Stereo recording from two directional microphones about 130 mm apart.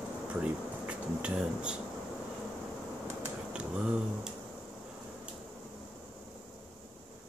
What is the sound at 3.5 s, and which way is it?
Speech, 5° right (ahead or behind).